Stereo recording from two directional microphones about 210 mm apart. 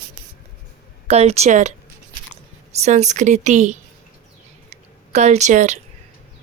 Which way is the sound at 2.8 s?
35° right (ahead or behind).